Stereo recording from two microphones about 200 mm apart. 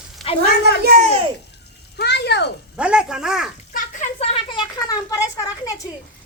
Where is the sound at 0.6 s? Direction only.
50° right (ahead or behind).